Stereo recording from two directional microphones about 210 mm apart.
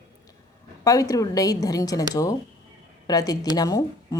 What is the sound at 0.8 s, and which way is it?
A woman's voice, 15° left (ahead or behind).